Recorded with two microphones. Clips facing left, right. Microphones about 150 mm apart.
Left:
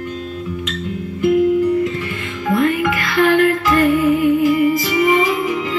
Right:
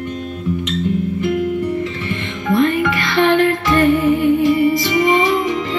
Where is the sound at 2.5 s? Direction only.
30° right (ahead or behind).